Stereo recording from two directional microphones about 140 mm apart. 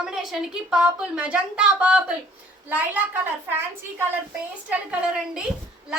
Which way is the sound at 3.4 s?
15° right (ahead or behind).